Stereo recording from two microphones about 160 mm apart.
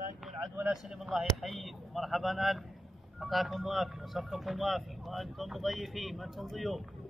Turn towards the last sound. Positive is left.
turn(degrees=0)  # may be behind; listen again after turning